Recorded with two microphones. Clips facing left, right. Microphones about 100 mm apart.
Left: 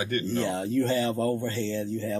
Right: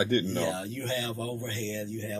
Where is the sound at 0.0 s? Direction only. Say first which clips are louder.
Right 1 dB; 25° right (ahead or behind).